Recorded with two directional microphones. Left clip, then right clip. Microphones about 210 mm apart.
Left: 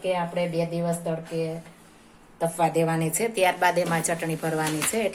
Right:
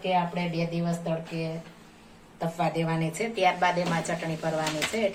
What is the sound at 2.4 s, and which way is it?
A woman's voice, 50° left (ahead or behind).